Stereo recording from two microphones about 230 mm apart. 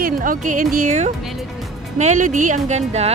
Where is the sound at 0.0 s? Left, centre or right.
Right.